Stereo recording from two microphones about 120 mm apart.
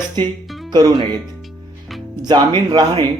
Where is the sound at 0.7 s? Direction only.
30° right (ahead or behind).